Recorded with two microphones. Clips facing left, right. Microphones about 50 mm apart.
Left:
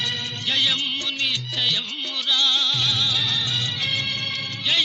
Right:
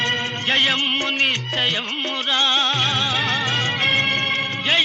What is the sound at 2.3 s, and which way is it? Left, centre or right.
Music, right.